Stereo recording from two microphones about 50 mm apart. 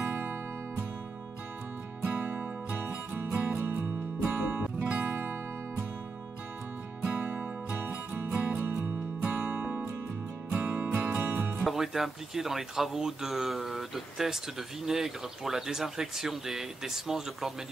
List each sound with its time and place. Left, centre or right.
0.0 s music: right
2.7 s music: right
5.1 s music: right
7.0 s music: right
9.2 s music: right
11.1 s music: right
11.6 s speech: centre